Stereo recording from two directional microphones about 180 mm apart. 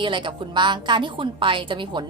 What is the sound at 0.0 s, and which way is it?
A woman's voice, 25° right (ahead or behind).